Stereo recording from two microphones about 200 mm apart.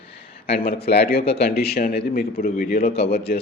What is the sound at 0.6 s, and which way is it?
A man's voice, 50° left (ahead or behind).